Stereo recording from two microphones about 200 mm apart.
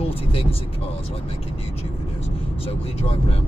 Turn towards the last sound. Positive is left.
turn(degrees=30)  # may be behind; listen again after turning